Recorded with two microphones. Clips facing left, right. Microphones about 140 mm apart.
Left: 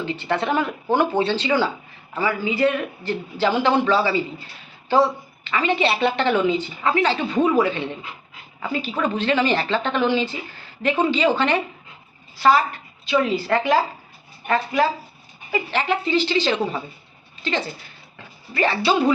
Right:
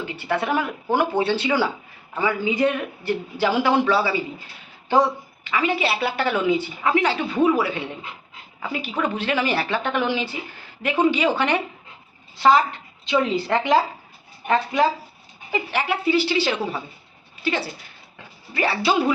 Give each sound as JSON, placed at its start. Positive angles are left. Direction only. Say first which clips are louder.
{"t": 0.0, "sound": "a woman's voice", "louder": "left 1 dB", "side_deg": -10}